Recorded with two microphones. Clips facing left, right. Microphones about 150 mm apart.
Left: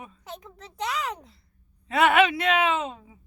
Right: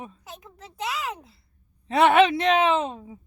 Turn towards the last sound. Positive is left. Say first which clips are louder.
# right 4 dB
turn(degrees=-35)  # may be behind; listen again after turning